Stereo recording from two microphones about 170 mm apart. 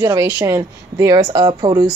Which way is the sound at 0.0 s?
20° right (ahead or behind).